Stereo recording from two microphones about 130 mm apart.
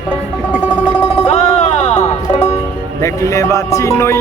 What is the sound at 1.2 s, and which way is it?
Music, 60° left (ahead or behind).